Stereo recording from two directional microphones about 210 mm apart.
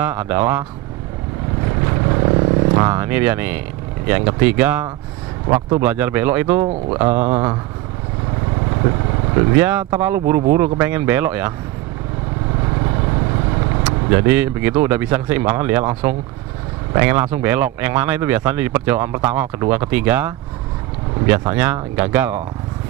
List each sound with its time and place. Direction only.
0.0 s speech: 10° right (ahead or behind)
1.9 s vehicle: 20° right (ahead or behind)
4.1 s speech: 10° right (ahead or behind)
9.3 s speech: 20° right (ahead or behind)
13.8 s speech: 10° right (ahead or behind)